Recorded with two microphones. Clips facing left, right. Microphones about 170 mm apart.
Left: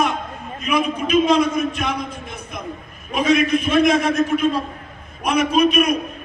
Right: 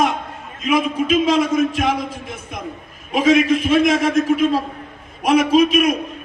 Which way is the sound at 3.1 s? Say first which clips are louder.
Right 3 dB; 90° right.